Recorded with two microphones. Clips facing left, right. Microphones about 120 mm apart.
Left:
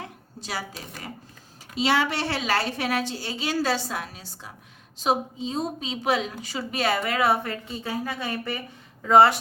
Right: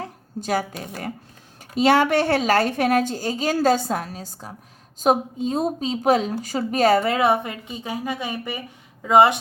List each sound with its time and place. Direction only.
0.3 s a woman's voice: 50° right (ahead or behind)
7.2 s a woman's voice: 20° right (ahead or behind)